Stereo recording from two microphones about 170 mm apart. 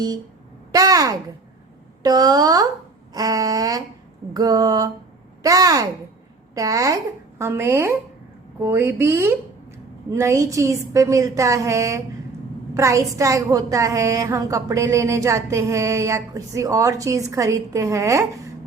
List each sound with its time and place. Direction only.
0.7 s a woman's voice: 20° right (ahead or behind)